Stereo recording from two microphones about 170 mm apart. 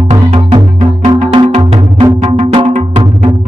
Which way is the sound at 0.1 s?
40° right (ahead or behind).